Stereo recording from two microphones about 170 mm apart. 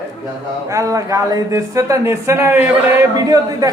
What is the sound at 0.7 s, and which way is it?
Speech, 20° right (ahead or behind).